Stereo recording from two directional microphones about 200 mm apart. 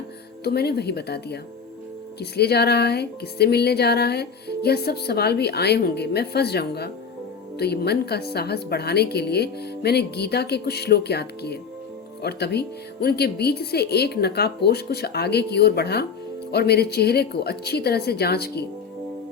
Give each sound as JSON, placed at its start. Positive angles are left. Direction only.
{"t": 0.4, "sound": "speech", "side_deg": 55}